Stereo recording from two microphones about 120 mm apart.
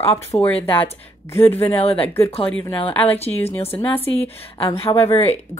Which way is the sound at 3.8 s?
15° left (ahead or behind).